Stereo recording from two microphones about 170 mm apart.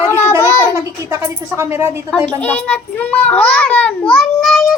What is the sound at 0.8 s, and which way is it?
A child's voice, 20° right (ahead or behind).